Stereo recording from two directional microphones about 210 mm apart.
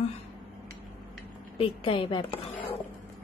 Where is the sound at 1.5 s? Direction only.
25° left (ahead or behind).